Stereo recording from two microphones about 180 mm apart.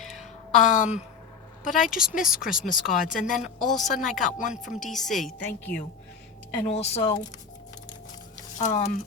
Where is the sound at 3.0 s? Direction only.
50° left (ahead or behind).